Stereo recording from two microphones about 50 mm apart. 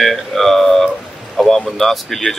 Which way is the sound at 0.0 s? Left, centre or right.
Centre.